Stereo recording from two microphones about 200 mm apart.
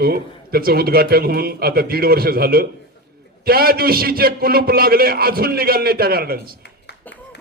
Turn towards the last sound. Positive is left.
turn(degrees=-50)  # may be behind; listen again after turning